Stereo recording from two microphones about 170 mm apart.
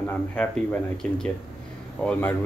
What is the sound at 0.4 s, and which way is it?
Speech, 5° left (ahead or behind).